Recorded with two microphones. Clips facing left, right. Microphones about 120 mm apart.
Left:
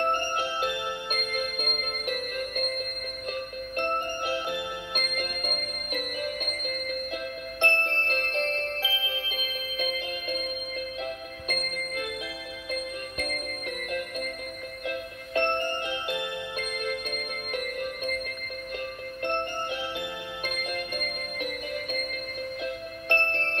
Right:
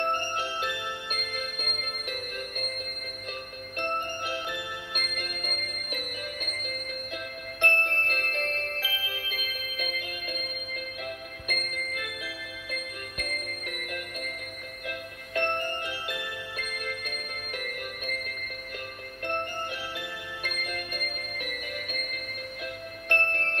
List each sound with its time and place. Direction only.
0.1 s music: 15° left (ahead or behind)
3.7 s music: 20° left (ahead or behind)
7.6 s music: 25° left (ahead or behind)
20.0 s music: 25° left (ahead or behind)